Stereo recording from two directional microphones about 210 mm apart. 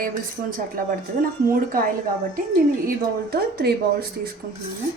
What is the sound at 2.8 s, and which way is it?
Speech, 45° right (ahead or behind).